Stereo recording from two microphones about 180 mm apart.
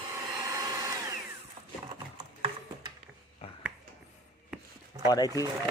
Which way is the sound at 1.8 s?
35° right (ahead or behind).